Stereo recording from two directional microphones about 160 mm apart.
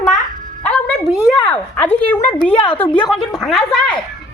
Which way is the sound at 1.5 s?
10° left (ahead or behind).